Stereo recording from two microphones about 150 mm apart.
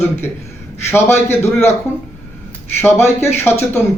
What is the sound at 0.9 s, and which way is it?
Speech, 15° left (ahead or behind).